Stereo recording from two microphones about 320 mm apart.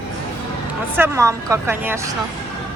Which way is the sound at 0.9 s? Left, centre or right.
Centre.